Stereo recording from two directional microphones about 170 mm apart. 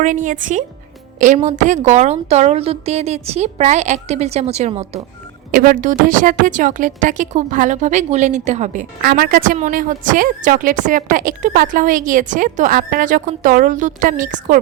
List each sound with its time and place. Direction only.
0.0 s a woman's voice: 50° right (ahead or behind)
5.5 s a woman's voice: 55° right (ahead or behind)